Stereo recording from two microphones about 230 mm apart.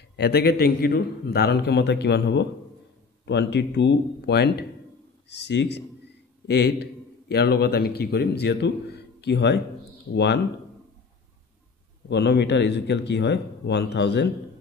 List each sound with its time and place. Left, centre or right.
0.1 s a man's voice: left
12.1 s a man's voice: left